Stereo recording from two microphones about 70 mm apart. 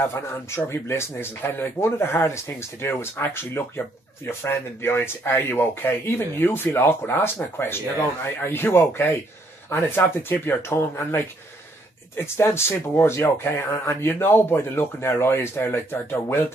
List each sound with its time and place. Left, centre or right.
0.0 s speech: left
12.4 s speech: left